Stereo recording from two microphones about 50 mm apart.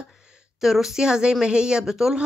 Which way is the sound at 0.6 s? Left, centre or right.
Centre.